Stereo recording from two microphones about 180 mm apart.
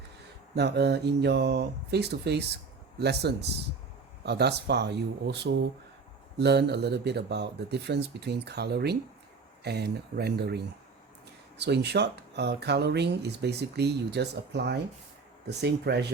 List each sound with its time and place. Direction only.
0.5 s speech: 65° right (ahead or behind)